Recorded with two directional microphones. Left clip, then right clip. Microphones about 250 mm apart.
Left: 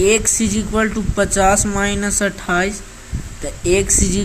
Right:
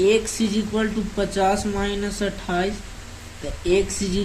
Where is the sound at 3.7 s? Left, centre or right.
Left.